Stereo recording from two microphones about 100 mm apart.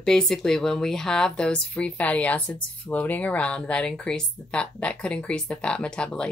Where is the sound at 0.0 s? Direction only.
5° left (ahead or behind).